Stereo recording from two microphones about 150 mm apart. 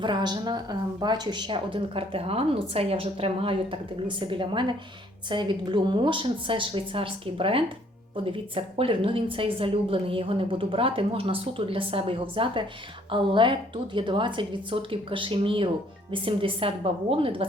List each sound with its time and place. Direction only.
0.0 s a woman's voice: 30° right (ahead or behind)